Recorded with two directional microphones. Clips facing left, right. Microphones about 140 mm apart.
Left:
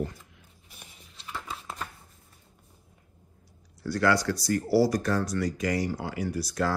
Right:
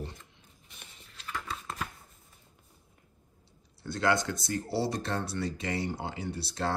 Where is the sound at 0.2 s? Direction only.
5° left (ahead or behind).